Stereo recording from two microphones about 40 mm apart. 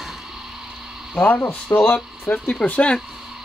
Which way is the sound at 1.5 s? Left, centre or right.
Left.